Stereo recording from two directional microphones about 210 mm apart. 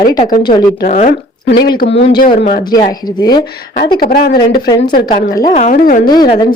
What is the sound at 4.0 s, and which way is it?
Speech, 45° left (ahead or behind).